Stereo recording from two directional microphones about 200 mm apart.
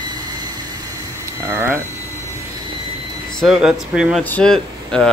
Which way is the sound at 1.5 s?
10° right (ahead or behind).